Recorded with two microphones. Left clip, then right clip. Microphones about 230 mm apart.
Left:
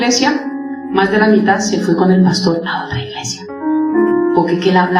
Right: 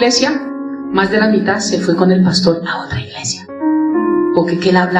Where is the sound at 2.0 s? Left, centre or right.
Right.